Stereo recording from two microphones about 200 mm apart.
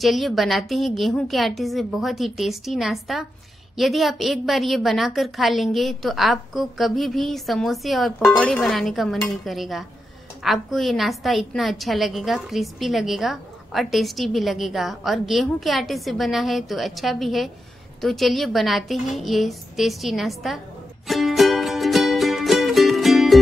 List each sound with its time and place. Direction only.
0.0 s a woman's voice: centre (ahead or behind)
21.1 s music: centre (ahead or behind)